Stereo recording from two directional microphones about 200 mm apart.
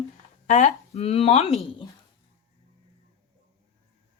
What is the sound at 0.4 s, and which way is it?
Speech, 35° left (ahead or behind).